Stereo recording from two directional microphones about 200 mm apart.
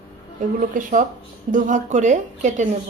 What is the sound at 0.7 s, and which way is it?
Speech, 40° right (ahead or behind).